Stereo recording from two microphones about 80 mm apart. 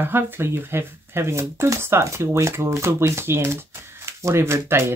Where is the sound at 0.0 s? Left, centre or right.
Right.